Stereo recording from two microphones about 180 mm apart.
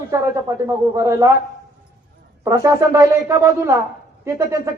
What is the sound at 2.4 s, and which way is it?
Speech, 20° right (ahead or behind).